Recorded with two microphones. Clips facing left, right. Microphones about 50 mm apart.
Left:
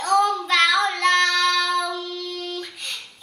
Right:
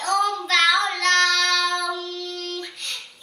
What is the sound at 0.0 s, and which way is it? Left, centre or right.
Child singing, centre.